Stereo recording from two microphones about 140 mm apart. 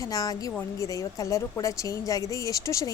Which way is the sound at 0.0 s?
25° left (ahead or behind).